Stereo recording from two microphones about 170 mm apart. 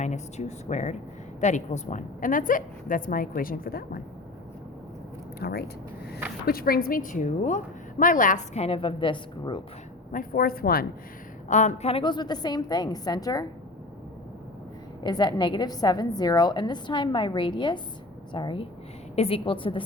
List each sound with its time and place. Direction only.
0.0 s a woman's voice: 45° left (ahead or behind); by 4.0 s 60° left (ahead or behind)
5.4 s a woman's voice: 70° left (ahead or behind); by 9.6 s 30° left (ahead or behind)
10.1 s speech: 55° left (ahead or behind)
11.4 s a woman's voice: 45° left (ahead or behind); by 13.4 s 20° left (ahead or behind)
15.0 s a woman's voice: 25° left (ahead or behind)